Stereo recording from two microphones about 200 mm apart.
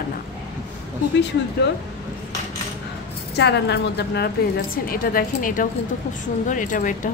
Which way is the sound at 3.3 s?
55° left (ahead or behind).